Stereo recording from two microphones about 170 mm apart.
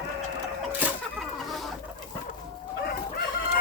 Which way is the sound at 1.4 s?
Centre (ahead or behind).